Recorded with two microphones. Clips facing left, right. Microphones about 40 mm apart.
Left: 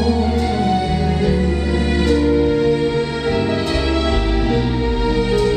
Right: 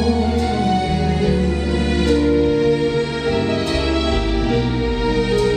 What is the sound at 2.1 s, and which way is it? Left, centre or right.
Music, centre.